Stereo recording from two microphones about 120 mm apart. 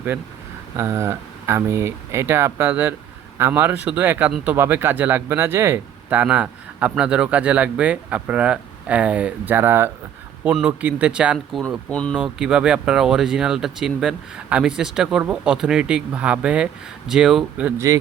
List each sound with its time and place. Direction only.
0.8 s speech: 20° right (ahead or behind)
11.9 s speech: 10° left (ahead or behind)
12.1 s speech: 5° right (ahead or behind)